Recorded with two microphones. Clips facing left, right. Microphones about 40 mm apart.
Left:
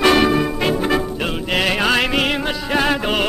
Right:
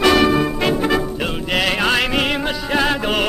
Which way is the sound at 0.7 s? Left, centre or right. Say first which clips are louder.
Right 1 dB; centre.